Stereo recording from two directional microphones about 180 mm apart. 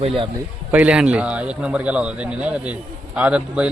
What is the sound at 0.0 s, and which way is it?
Speech, 30° right (ahead or behind).